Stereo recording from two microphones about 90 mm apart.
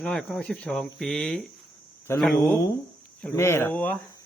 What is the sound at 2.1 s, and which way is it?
Speech, 30° left (ahead or behind).